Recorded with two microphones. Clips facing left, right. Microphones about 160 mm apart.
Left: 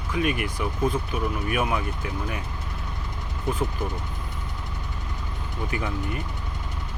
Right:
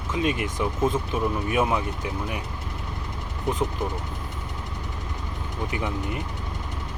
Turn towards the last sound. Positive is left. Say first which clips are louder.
# right 1 dB
turn(degrees=-20)  # may be behind; listen again after turning